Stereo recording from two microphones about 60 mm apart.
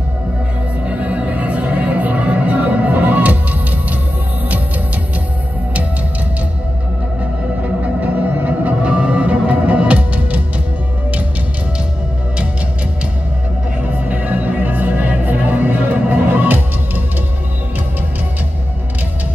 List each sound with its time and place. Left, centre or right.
0.8 s music: right
8.0 s music: right
13.9 s music: right